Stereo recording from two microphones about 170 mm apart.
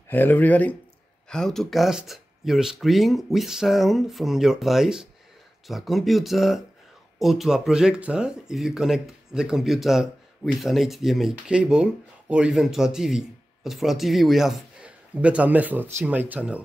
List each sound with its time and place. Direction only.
0.1 s a man's voice: 10° left (ahead or behind); by 16.6 s 10° right (ahead or behind)